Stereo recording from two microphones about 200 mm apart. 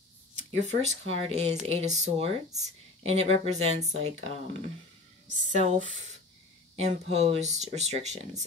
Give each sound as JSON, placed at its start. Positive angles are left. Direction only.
{"t": 0.5, "sound": "speech", "side_deg": -35}